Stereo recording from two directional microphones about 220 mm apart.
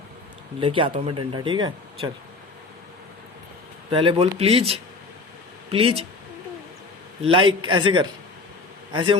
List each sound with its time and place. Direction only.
0.6 s speech: 25° right (ahead or behind)
3.9 s speech: 25° right (ahead or behind)
7.2 s a man's voice: 25° right (ahead or behind)